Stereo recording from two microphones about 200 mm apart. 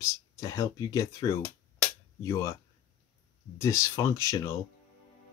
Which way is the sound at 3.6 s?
15° left (ahead or behind).